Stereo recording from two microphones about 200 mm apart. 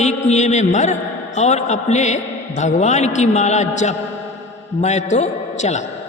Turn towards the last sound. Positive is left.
turn(degrees=35)  # may be behind; listen again after turning